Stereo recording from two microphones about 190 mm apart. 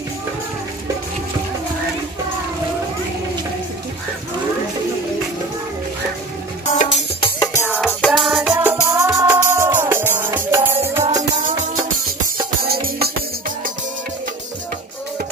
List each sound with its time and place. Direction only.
6.6 s music: 35° left (ahead or behind)
7.6 s music: 5° right (ahead or behind)
12.6 s music: 55° right (ahead or behind)